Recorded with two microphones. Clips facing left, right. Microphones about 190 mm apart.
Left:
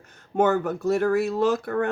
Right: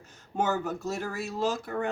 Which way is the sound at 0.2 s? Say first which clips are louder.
Left 7 dB; 60° left (ahead or behind).